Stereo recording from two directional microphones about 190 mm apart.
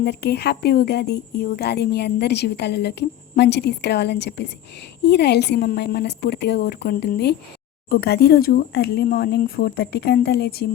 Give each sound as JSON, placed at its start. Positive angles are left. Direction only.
{"t": 0.0, "sound": "speech", "side_deg": 60}